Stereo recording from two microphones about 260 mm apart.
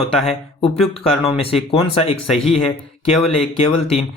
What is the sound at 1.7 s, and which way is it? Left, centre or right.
Speech, left.